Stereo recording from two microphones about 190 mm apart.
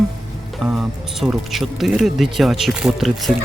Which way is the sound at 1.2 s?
Centre (ahead or behind).